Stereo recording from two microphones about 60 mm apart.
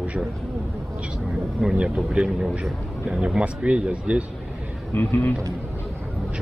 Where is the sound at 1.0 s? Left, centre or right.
Centre.